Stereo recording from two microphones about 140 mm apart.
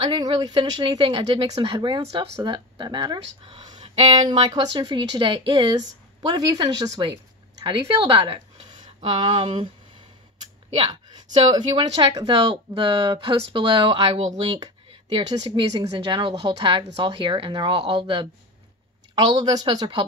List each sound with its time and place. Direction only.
0.0 s speech: 35° right (ahead or behind)
5.8 s speech: 25° right (ahead or behind)
10.8 s a woman's voice: 35° right (ahead or behind)